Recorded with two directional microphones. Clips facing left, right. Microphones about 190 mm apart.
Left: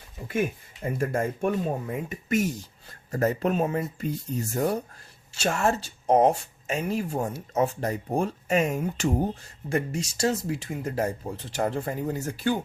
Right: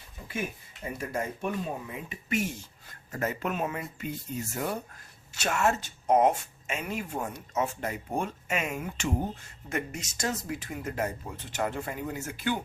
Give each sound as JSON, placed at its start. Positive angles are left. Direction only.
{"t": 0.9, "sound": "speech", "side_deg": 50}